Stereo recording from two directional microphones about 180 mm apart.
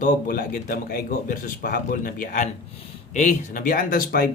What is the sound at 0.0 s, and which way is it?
Speech, 55° left (ahead or behind).